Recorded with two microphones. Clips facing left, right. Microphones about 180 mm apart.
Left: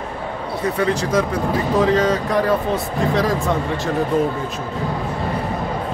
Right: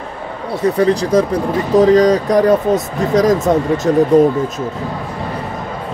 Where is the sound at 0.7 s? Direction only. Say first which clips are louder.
Right 7 dB; 35° right (ahead or behind).